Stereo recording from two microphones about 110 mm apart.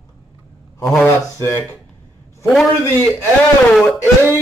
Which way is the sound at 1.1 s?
25° left (ahead or behind).